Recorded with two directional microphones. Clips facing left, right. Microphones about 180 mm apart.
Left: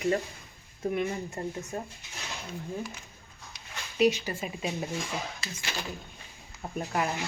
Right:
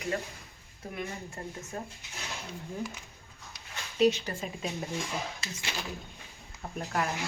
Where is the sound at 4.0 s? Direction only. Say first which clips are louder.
Left 1 dB; 10° left (ahead or behind).